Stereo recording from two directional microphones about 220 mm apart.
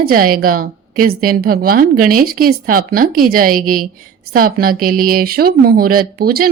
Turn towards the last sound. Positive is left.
turn(degrees=-45)  # may be behind; listen again after turning